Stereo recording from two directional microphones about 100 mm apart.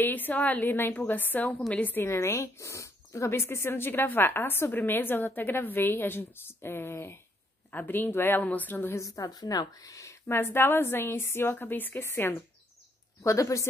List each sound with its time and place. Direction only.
0.0 s a woman's voice: 20° left (ahead or behind)
9.0 s speech: 35° left (ahead or behind)